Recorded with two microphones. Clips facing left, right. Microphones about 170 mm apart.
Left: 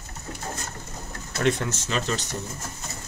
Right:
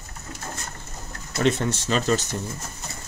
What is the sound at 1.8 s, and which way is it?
Speech, 40° right (ahead or behind).